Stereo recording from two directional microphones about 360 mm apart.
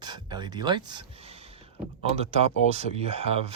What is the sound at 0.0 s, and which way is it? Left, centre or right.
Speech, centre.